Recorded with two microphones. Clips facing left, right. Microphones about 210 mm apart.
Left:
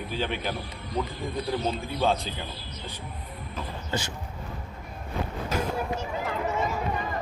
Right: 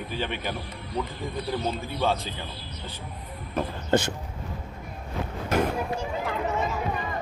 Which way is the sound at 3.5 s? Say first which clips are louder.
Right 9 dB; 55° right (ahead or behind).